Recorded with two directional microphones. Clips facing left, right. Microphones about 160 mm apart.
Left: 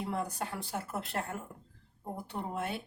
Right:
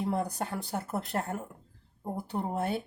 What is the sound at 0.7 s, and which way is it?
A woman's voice, 35° right (ahead or behind).